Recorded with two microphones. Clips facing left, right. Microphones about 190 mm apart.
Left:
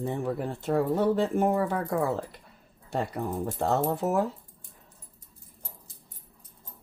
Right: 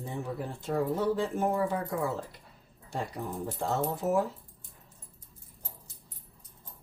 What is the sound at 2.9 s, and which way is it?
Speech, 60° left (ahead or behind).